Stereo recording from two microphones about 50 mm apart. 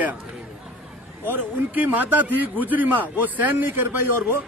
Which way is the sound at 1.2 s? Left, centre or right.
Right.